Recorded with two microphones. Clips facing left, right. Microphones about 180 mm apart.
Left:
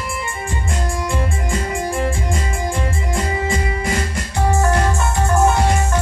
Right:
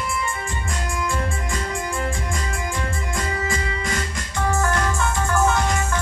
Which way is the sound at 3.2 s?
30° left (ahead or behind).